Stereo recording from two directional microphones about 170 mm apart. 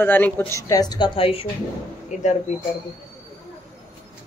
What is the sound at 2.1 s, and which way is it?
Speech, 45° left (ahead or behind).